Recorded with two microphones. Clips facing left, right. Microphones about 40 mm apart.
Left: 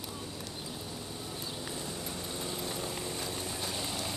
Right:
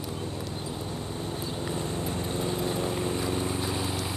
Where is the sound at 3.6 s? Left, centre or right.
Centre.